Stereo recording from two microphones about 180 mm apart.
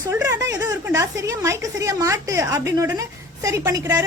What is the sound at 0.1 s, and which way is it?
A woman's voice, 15° right (ahead or behind).